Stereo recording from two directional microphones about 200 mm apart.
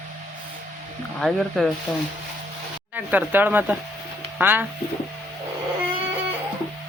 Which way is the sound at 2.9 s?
10° right (ahead or behind).